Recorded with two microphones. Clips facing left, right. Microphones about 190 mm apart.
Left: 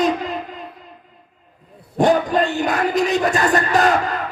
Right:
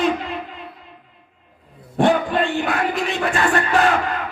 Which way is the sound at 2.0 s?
40° left (ahead or behind).